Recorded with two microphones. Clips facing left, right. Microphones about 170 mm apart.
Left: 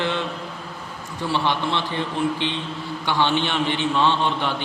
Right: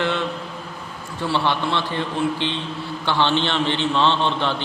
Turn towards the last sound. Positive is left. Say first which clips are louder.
# right 1 dB
turn(degrees=10)  # may be behind; listen again after turning